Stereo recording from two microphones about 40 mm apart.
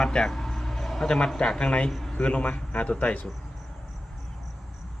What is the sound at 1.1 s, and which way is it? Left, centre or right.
Speech, centre.